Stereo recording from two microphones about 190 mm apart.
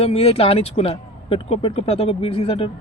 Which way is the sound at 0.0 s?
30° left (ahead or behind).